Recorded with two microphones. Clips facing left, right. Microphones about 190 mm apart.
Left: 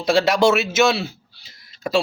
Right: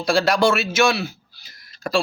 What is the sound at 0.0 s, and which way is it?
A man's voice, 20° left (ahead or behind).